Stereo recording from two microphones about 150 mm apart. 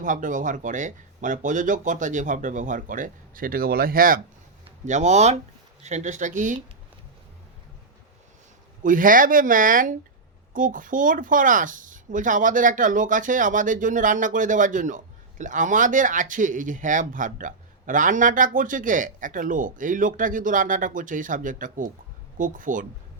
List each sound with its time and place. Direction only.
0.0 s speech: 60° right (ahead or behind)
4.9 s speech: 50° right (ahead or behind)
8.8 s speech: 60° right (ahead or behind)